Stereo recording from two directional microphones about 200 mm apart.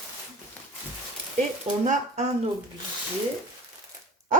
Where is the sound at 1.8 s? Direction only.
35° right (ahead or behind).